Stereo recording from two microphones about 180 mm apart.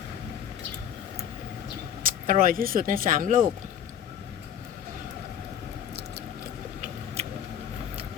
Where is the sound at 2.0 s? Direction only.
50° right (ahead or behind).